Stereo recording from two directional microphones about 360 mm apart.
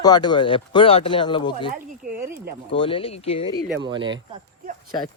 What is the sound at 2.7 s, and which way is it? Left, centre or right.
Speech, centre.